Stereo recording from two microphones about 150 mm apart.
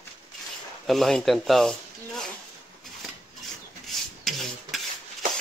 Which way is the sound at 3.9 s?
Centre (ahead or behind).